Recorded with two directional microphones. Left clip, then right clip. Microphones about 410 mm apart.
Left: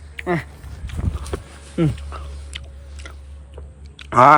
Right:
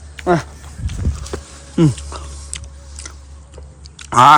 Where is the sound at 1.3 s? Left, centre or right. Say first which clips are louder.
Right 1 dB; centre.